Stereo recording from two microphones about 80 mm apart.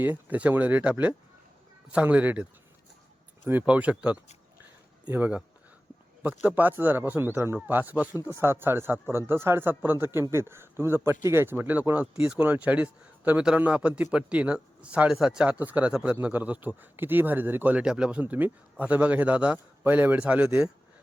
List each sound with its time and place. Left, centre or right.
0.0 s speech: right
15.5 s speech: centre